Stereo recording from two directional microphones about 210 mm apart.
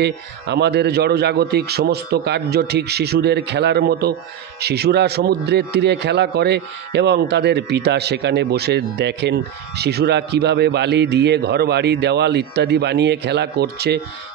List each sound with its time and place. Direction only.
0.0 s speech: 55° right (ahead or behind)